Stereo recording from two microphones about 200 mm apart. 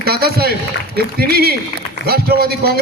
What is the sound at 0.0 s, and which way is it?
A man's voice, 50° right (ahead or behind).